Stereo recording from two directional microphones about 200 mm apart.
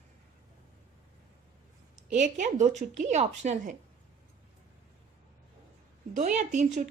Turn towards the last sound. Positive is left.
turn(degrees=-35)  # may be behind; listen again after turning